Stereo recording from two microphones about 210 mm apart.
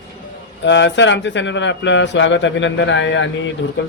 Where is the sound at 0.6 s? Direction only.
60° left (ahead or behind).